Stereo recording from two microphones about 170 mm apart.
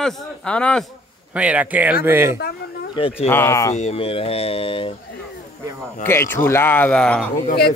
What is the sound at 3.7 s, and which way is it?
Speech, 35° left (ahead or behind).